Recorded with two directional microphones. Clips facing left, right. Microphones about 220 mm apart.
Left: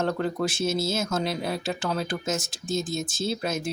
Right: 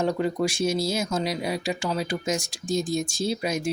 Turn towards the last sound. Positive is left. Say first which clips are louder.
# right 2 dB
turn(degrees=-10)  # may be behind; listen again after turning